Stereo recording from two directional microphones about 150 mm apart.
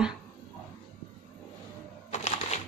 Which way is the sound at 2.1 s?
45° left (ahead or behind).